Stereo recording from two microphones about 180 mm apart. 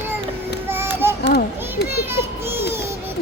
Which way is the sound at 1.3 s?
65° left (ahead or behind).